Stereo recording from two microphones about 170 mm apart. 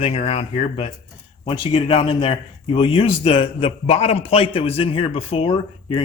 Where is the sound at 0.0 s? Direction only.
35° left (ahead or behind).